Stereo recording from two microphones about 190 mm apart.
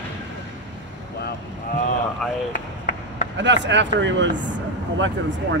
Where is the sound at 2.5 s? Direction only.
45° left (ahead or behind).